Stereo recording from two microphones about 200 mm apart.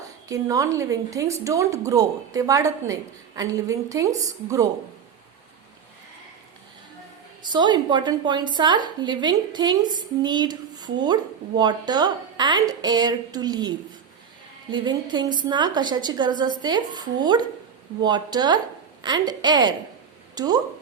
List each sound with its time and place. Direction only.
0.0 s speech: 15° right (ahead or behind)
7.5 s a woman's voice: 20° right (ahead or behind)